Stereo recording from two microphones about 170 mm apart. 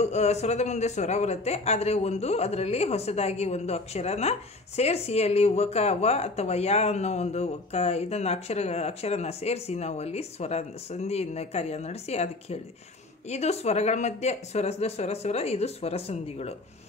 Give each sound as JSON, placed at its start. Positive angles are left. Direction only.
{"t": 0.0, "sound": "speech", "side_deg": 40}